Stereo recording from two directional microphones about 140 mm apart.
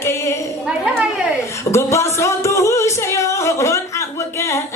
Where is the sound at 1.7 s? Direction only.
20° left (ahead or behind).